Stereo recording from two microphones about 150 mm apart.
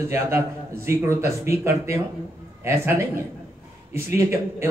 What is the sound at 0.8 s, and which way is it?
A man's voice, 20° right (ahead or behind).